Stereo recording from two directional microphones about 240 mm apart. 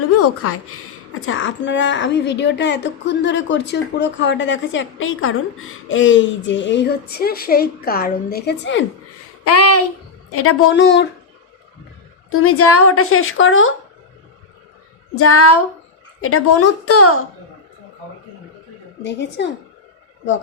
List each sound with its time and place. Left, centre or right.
0.2 s a woman's voice: left
9.4 s a sound: left
10.3 s a woman's voice: left
12.3 s a woman's voice: left
15.1 s a woman's voice: left
19.0 s a woman's voice: left